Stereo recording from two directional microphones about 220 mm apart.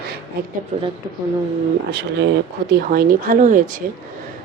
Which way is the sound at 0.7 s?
30° right (ahead or behind).